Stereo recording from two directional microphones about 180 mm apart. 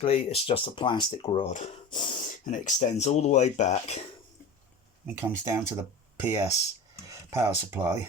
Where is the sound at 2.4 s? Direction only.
45° left (ahead or behind).